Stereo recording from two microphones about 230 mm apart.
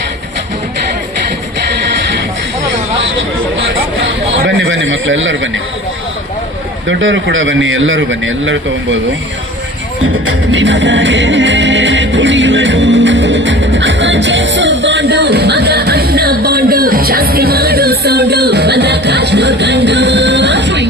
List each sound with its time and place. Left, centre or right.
3.7 s a sound: right
6.8 s a man's voice: right
10.5 s music: right